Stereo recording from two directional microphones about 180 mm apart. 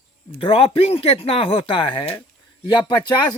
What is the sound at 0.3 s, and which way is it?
Speech, 30° left (ahead or behind).